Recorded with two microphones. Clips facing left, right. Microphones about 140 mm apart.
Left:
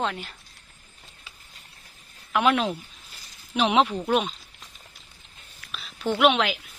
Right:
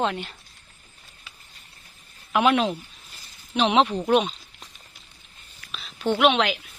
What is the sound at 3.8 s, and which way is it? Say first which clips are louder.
Speech: right 2 dB; 10° right (ahead or behind).